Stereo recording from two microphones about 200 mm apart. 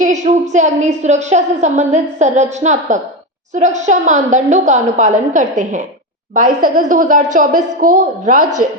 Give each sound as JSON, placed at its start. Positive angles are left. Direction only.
{"t": 0.0, "sound": "a woman's voice", "side_deg": -35}